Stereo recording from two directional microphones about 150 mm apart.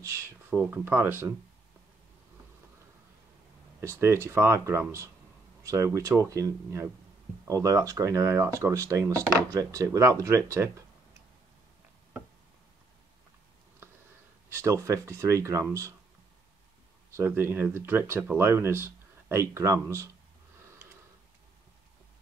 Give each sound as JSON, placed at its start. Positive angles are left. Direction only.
{"t": 0.0, "sound": "speech", "side_deg": -20}
{"t": 3.8, "sound": "speech", "side_deg": -15}
{"t": 14.5, "sound": "speech", "side_deg": -20}
{"t": 17.2, "sound": "speech", "side_deg": -15}